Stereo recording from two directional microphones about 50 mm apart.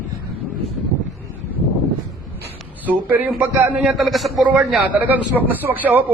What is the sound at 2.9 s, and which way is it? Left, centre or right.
A man's voice, right.